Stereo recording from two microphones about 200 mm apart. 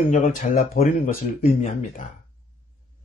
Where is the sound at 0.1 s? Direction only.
40° left (ahead or behind).